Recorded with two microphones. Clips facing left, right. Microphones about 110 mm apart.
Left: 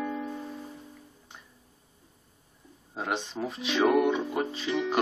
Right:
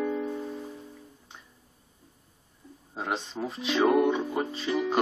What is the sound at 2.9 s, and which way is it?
Music, centre (ahead or behind).